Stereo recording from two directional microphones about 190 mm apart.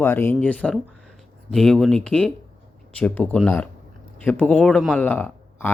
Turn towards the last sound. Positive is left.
turn(degrees=10)  # may be behind; listen again after turning